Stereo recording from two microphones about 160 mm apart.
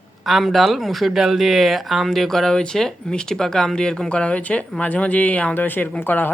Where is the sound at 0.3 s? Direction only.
Centre (ahead or behind).